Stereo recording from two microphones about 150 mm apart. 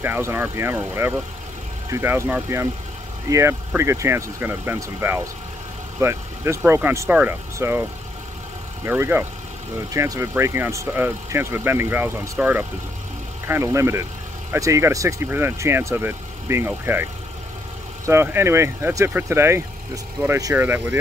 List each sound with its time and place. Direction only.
0.0 s speech: 15° right (ahead or behind)
8.8 s speech: 15° right (ahead or behind)